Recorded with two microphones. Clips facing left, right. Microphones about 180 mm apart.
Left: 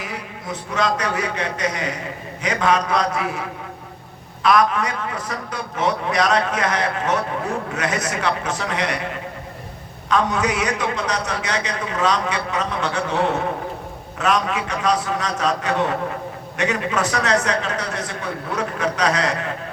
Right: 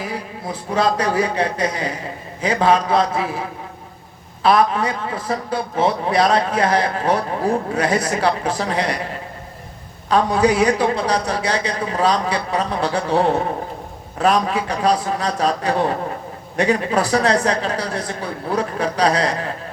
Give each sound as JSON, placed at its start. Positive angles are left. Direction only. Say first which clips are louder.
{"t": 0.0, "sound": "a man's voice", "louder": "right 4 dB", "side_deg": -30}
{"t": 4.4, "sound": "a man's voice", "louder": "right 2 dB", "side_deg": -30}